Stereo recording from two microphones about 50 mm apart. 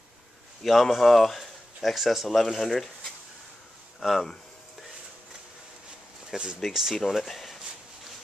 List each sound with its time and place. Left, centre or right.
0.7 s speech: centre
6.3 s speech: centre